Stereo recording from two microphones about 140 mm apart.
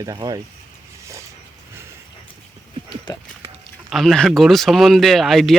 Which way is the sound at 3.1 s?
35° left (ahead or behind).